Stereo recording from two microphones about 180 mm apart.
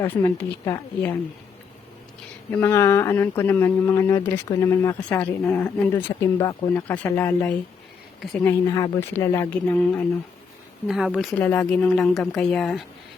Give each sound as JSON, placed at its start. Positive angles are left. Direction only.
{"t": 0.0, "sound": "speech", "side_deg": 15}
{"t": 2.5, "sound": "speech", "side_deg": 10}
{"t": 10.8, "sound": "speech", "side_deg": -5}
{"t": 11.3, "sound": "speech", "side_deg": 10}